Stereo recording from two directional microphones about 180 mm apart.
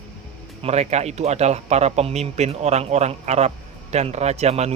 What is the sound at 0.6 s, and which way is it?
Speech, 35° right (ahead or behind).